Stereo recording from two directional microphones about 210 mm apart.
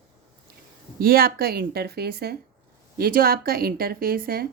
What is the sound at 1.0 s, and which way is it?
A woman's voice, 45° right (ahead or behind).